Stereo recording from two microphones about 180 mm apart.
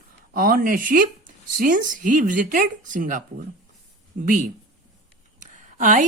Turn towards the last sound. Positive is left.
turn(degrees=-45)  # may be behind; listen again after turning